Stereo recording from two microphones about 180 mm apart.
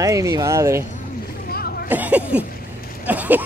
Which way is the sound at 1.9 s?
10° right (ahead or behind).